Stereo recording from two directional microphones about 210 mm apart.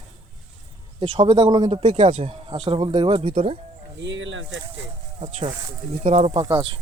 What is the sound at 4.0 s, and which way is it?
Speech, 60° right (ahead or behind).